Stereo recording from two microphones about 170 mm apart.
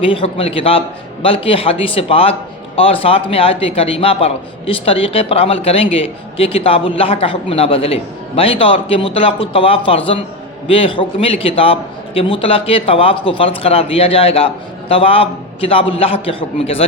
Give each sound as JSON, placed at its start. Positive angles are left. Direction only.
{"t": 0.0, "sound": "a man's voice", "side_deg": 30}